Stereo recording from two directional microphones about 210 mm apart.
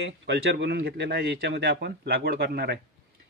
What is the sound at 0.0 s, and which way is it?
A man's voice, 55° right (ahead or behind).